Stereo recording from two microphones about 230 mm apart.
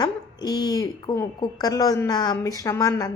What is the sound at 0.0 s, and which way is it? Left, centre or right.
A woman's voice, centre.